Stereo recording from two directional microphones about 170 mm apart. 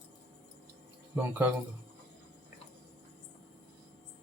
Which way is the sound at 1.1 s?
10° right (ahead or behind).